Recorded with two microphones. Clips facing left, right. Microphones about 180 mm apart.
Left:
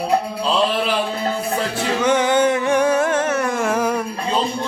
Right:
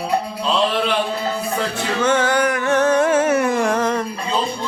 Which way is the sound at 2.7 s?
10° left (ahead or behind).